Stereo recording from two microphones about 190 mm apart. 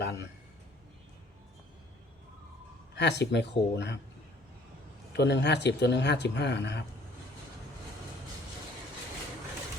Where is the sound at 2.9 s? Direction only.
65° left (ahead or behind).